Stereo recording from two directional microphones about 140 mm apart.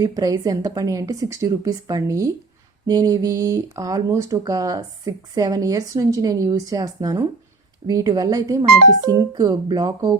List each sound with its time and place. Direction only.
0.0 s speech: 25° right (ahead or behind)